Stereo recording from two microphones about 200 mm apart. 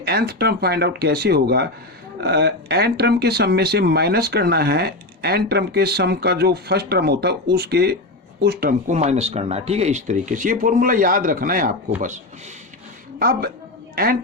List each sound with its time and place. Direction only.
0.0 s speech: 50° right (ahead or behind)
8.9 s a woman's voice: 35° right (ahead or behind)